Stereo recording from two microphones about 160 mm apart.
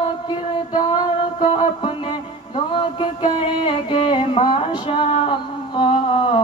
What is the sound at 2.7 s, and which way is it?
Music, 35° left (ahead or behind).